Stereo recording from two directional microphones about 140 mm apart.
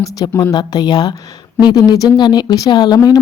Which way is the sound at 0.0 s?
25° left (ahead or behind).